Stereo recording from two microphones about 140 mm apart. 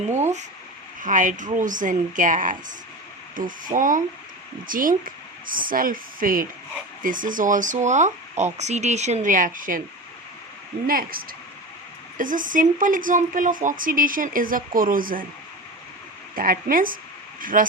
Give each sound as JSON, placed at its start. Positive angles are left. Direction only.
{"t": 1.0, "sound": "speech", "side_deg": -65}
{"t": 7.0, "sound": "speech", "side_deg": -70}
{"t": 10.8, "sound": "speech", "side_deg": -90}
{"t": 12.1, "sound": "speech", "side_deg": -70}
{"t": 16.3, "sound": "speech", "side_deg": -90}
{"t": 17.4, "sound": "speech", "side_deg": -80}